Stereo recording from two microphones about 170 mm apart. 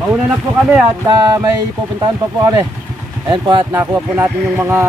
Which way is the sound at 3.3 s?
25° right (ahead or behind).